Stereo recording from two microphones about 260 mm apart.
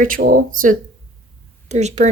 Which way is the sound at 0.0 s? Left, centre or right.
Right.